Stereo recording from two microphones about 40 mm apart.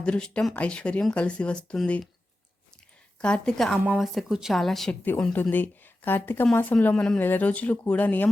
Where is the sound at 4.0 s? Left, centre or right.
Centre.